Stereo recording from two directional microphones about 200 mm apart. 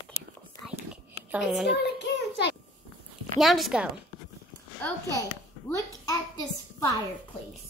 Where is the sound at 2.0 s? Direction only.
60° left (ahead or behind).